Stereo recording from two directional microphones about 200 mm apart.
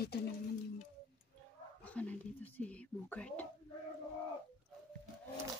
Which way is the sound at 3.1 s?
5° left (ahead or behind).